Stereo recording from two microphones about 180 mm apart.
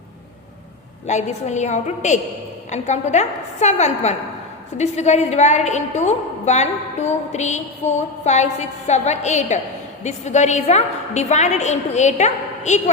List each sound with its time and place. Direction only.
1.0 s a woman's voice: 40° left (ahead or behind)